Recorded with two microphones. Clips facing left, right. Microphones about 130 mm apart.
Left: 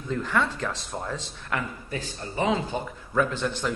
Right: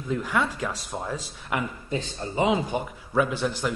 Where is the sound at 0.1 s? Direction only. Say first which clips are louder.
Even; 5° right (ahead or behind).